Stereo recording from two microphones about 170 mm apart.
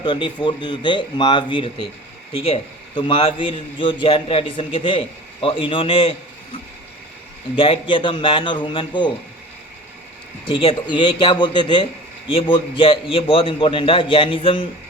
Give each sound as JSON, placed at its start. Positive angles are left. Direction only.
{"t": 0.0, "sound": "a man's voice", "side_deg": 25}
{"t": 7.5, "sound": "a man's voice", "side_deg": 30}
{"t": 10.4, "sound": "a man's voice", "side_deg": 25}